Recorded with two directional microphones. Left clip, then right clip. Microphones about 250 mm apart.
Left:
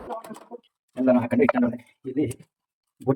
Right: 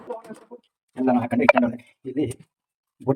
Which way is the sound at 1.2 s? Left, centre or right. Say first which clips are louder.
Left 2 dB; centre.